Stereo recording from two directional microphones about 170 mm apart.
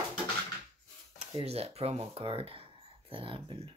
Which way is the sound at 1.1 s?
35° right (ahead or behind).